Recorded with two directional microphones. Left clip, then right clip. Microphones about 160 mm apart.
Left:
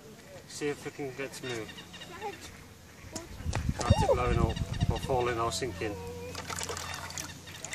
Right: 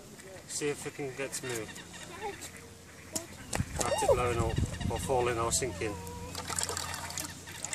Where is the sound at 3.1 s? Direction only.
55° right (ahead or behind).